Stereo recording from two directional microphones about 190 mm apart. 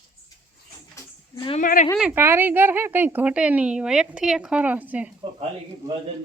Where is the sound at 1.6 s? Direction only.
45° left (ahead or behind).